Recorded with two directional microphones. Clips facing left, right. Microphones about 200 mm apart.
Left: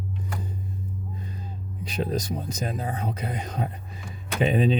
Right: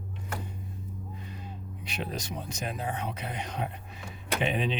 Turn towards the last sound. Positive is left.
turn(degrees=40)  # may be behind; listen again after turning